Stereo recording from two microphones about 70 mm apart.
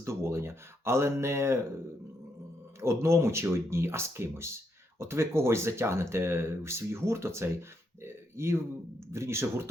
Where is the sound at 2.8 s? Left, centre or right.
Right.